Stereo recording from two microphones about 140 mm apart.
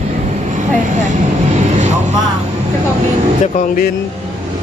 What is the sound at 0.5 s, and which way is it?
Vehicle, 60° right (ahead or behind).